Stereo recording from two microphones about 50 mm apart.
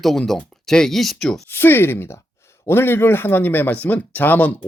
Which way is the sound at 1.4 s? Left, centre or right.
Left.